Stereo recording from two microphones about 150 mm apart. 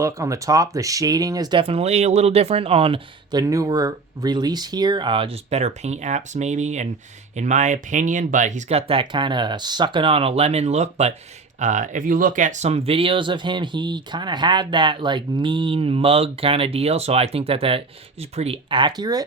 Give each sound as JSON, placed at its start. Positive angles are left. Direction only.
{"t": 0.0, "sound": "speech", "side_deg": -20}
{"t": 3.3, "sound": "speech", "side_deg": -20}
{"t": 8.9, "sound": "speech", "side_deg": -35}